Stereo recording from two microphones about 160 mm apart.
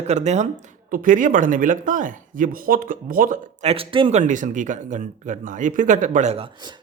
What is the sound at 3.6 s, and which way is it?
Speech, 35° right (ahead or behind).